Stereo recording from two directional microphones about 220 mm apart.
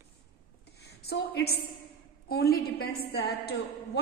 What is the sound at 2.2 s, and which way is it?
A woman's voice, 45° left (ahead or behind).